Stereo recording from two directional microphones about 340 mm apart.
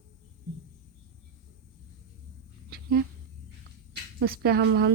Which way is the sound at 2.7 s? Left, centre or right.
Right.